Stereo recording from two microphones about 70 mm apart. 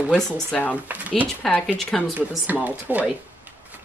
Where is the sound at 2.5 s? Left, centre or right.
Right.